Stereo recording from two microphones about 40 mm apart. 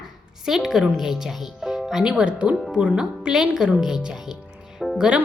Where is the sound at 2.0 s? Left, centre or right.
Right; by 4.0 s centre.